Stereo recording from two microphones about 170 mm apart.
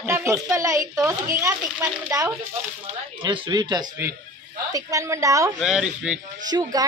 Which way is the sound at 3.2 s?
30° right (ahead or behind).